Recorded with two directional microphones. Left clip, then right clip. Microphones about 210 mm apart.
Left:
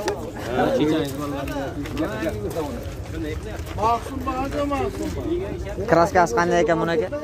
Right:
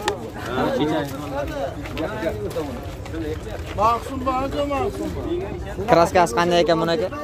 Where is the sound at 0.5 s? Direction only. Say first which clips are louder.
Left 1 dB; centre (ahead or behind).